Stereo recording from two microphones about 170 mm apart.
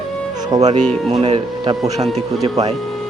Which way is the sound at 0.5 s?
20° right (ahead or behind).